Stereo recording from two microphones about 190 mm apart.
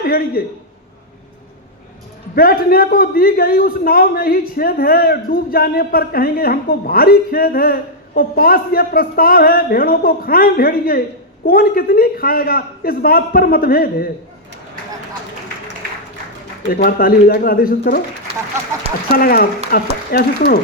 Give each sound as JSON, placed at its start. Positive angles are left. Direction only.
{"t": 0.0, "sound": "a man's voice", "side_deg": 50}
{"t": 2.3, "sound": "a man's voice", "side_deg": 50}
{"t": 16.6, "sound": "a man's voice", "side_deg": 50}
{"t": 19.1, "sound": "a man's voice", "side_deg": 50}